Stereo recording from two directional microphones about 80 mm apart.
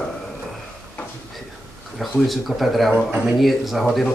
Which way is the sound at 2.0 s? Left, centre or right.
Centre.